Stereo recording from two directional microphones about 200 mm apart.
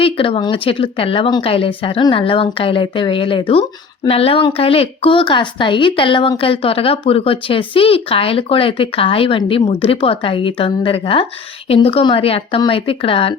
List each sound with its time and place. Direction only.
0.0 s speech: 25° left (ahead or behind)